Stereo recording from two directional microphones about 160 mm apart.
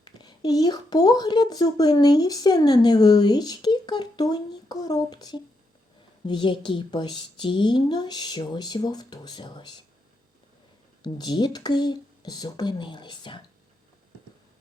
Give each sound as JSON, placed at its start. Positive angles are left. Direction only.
{"t": 0.0, "sound": "a woman's voice", "side_deg": 25}
{"t": 11.0, "sound": "a woman's voice", "side_deg": 25}